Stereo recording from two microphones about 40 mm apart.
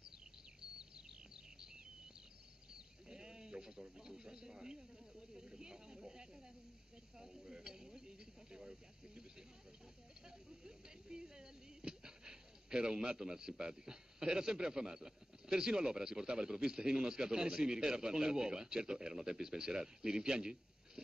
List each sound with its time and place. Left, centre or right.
0.6 s a sound: centre
2.7 s sheep: centre
7.2 s speech: centre
10.6 s speech: centre